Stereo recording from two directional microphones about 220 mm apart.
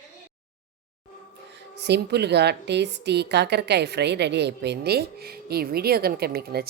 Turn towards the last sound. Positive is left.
turn(degrees=-45)  # may be behind; listen again after turning